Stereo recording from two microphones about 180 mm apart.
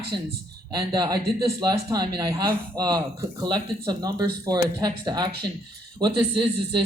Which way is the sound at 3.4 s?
25° right (ahead or behind).